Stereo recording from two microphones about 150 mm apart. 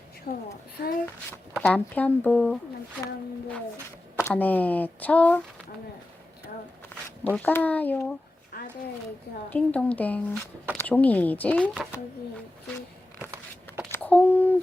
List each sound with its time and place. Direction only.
0.3 s a child's voice: 75° left (ahead or behind)
1.5 s speech: 10° left (ahead or behind)
7.3 s speech: 10° left (ahead or behind)
8.5 s a sound: 90° left
9.5 s speech: 10° left (ahead or behind)
13.9 s speech: 10° left (ahead or behind)